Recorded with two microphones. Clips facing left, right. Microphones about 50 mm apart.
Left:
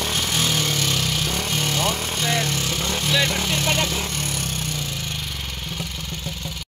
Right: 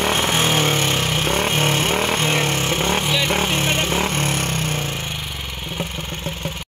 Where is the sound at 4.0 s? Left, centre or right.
Right.